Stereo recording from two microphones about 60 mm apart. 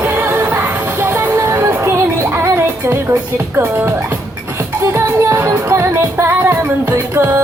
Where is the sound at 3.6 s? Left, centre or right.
Right.